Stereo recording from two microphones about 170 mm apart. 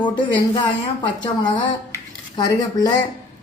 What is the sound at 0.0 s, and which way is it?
A woman's voice, 25° left (ahead or behind).